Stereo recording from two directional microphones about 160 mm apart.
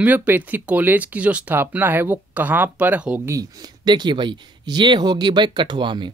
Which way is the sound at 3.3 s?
25° right (ahead or behind).